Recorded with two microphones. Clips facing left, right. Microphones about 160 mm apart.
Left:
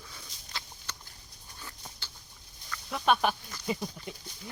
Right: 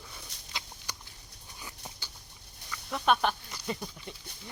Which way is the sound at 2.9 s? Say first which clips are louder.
Even; 5° left (ahead or behind).